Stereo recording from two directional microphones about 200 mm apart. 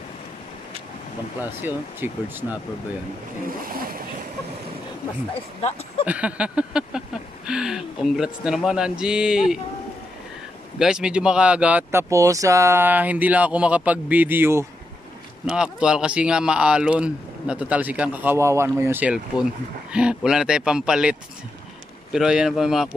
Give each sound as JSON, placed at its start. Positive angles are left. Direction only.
{"t": 1.4, "sound": "speech", "side_deg": -10}
{"t": 3.4, "sound": "vehicle", "side_deg": -45}
{"t": 5.6, "sound": "speech", "side_deg": 30}
{"t": 6.0, "sound": "speech", "side_deg": -5}
{"t": 10.8, "sound": "speech", "side_deg": -5}